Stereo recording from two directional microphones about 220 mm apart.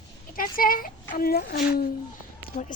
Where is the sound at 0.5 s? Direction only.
40° left (ahead or behind).